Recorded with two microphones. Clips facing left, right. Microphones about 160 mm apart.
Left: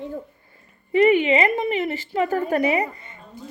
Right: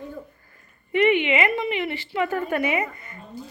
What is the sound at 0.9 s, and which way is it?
A woman's voice, 40° left (ahead or behind).